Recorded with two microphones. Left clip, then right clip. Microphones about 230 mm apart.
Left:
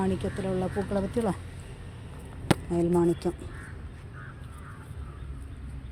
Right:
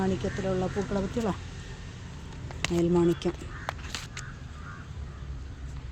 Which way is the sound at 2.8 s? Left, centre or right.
Centre.